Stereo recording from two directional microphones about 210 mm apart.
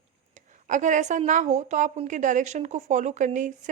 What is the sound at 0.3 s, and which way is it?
A woman's voice, 35° right (ahead or behind).